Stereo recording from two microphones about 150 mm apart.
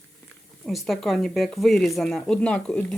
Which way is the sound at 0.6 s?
Centre (ahead or behind).